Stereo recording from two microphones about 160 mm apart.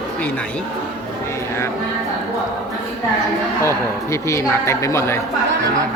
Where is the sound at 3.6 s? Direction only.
20° left (ahead or behind).